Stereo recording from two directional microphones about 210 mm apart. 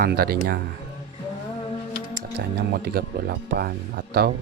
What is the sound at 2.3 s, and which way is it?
Speech, 50° right (ahead or behind).